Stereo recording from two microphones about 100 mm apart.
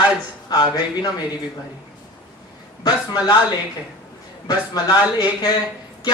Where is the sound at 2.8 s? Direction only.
40° left (ahead or behind).